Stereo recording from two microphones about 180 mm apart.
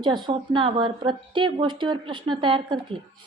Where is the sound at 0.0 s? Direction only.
25° right (ahead or behind).